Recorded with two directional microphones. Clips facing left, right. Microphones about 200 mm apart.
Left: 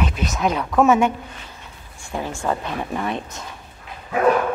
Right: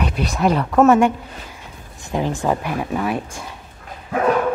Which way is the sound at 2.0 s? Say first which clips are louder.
Right 4 dB; 15° right (ahead or behind).